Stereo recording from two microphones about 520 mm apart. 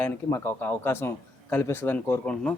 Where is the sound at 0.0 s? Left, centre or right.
Centre.